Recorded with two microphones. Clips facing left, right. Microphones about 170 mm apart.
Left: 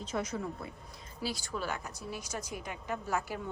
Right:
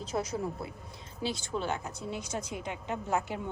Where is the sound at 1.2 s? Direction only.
25° right (ahead or behind).